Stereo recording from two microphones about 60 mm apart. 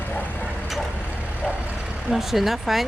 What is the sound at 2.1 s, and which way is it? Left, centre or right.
Speech, centre.